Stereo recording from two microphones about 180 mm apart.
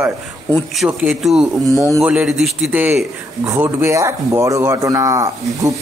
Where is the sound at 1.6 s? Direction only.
20° right (ahead or behind).